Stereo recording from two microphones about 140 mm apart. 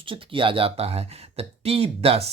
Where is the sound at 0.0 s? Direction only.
40° right (ahead or behind).